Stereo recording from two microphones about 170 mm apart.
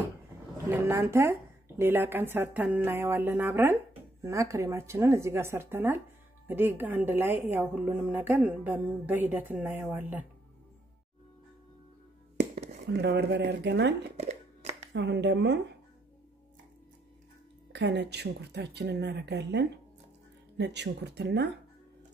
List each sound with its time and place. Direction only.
0.7 s a woman's voice: 15° right (ahead or behind)
12.8 s a woman's voice: 85° right
14.2 s a sound: 40° right (ahead or behind)
14.9 s speech: 85° right
17.7 s a woman's voice: 80° right